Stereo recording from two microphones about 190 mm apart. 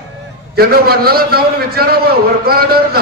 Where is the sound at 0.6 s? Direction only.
55° right (ahead or behind).